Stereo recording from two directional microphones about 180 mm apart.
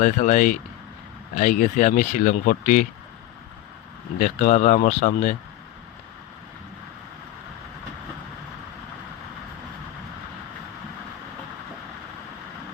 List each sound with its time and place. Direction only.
0.0 s speech: 45° left (ahead or behind)
4.2 s speech: 45° left (ahead or behind)